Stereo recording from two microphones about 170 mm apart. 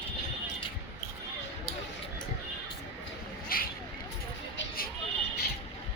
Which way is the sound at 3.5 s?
60° left (ahead or behind).